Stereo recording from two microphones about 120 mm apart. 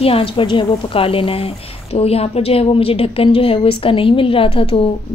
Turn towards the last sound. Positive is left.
turn(degrees=55)  # may be behind; listen again after turning